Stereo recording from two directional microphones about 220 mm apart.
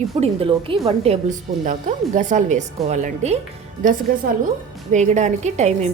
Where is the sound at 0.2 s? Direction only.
25° right (ahead or behind).